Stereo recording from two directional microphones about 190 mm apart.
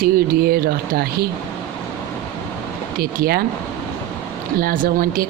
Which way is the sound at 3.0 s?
50° right (ahead or behind).